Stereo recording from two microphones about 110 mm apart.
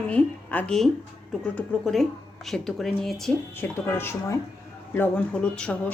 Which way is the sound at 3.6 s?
20° left (ahead or behind).